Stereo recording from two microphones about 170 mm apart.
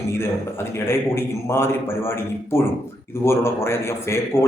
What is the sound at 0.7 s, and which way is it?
A man's voice, 15° left (ahead or behind).